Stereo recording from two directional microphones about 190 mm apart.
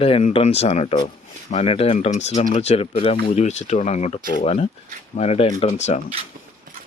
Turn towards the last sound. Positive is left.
turn(degrees=35)  # may be behind; listen again after turning